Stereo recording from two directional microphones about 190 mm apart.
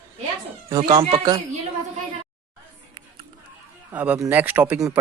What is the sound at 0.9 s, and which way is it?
Speech, 25° right (ahead or behind).